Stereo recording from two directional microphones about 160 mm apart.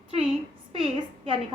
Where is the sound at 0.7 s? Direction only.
35° right (ahead or behind).